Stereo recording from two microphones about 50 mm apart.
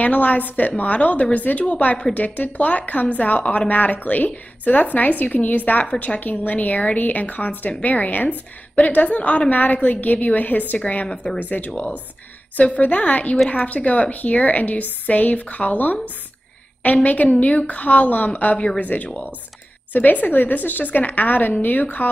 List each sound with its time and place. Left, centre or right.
0.0 s a woman's voice: left
10.8 s a woman's voice: left